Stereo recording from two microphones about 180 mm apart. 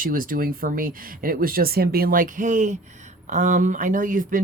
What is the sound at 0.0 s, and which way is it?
Speech, 50° right (ahead or behind).